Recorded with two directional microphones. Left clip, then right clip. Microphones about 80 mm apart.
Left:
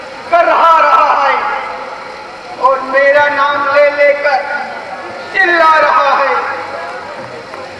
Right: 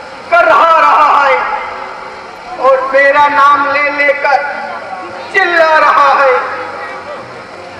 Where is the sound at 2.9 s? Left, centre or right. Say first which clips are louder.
Even; right.